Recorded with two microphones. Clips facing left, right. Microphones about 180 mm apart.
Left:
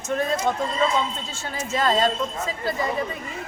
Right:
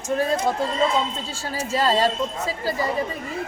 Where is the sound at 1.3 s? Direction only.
35° right (ahead or behind).